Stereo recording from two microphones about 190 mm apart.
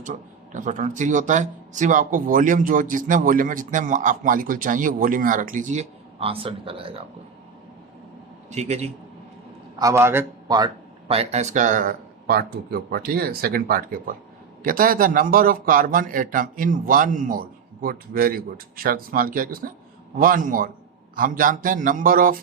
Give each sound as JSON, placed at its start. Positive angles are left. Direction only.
{"t": 0.0, "sound": "speech", "side_deg": -40}
{"t": 8.4, "sound": "a man's voice", "side_deg": -35}
{"t": 9.7, "sound": "a man's voice", "side_deg": -15}
{"t": 11.1, "sound": "speech", "side_deg": -35}